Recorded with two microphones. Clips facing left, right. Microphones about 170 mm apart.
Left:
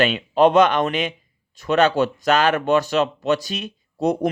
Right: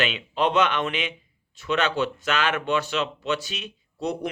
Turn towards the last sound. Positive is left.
turn(degrees=45)  # may be behind; listen again after turning